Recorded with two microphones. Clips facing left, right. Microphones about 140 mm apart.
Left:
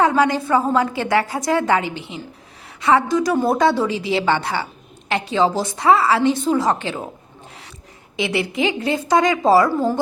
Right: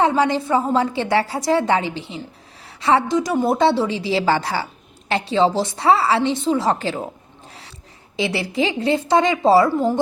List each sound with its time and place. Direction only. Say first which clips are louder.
0.0 s a woman's voice: left 1 dB; 25° right (ahead or behind)
8.1 s a woman's voice: even; 30° right (ahead or behind)